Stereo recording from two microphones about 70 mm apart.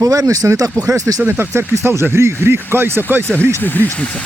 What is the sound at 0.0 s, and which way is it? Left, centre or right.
Speech, right.